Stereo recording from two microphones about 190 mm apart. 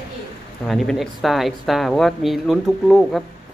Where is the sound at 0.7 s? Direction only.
Centre (ahead or behind).